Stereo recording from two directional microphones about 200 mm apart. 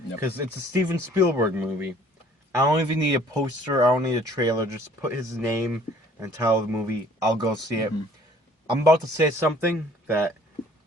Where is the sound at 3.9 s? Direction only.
15° right (ahead or behind).